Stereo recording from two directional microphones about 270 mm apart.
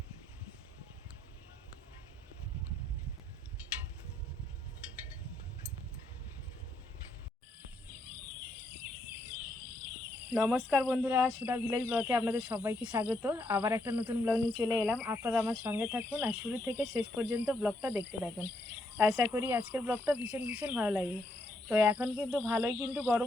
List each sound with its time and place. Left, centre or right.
10.3 s speech: centre